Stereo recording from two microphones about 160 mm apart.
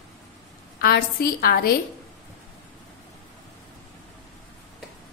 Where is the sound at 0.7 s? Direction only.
75° left (ahead or behind).